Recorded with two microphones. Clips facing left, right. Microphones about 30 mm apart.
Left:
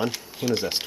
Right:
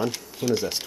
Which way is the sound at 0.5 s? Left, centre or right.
Left.